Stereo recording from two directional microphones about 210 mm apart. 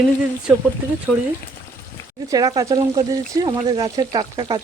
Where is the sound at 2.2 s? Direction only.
15° right (ahead or behind).